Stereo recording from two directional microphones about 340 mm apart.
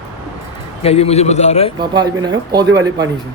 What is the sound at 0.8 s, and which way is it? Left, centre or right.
Speech, centre.